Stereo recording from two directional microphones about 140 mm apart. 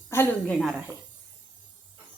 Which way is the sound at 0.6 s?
5° right (ahead or behind).